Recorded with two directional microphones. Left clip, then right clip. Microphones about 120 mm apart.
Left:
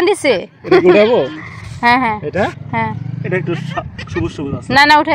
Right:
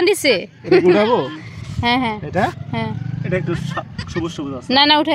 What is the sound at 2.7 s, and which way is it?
Speech, 25° right (ahead or behind).